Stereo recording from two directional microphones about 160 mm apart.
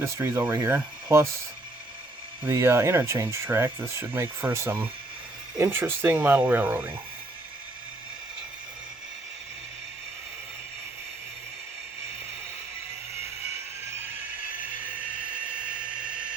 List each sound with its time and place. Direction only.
0.0 s speech: 15° right (ahead or behind)
2.4 s speech: 15° right (ahead or behind)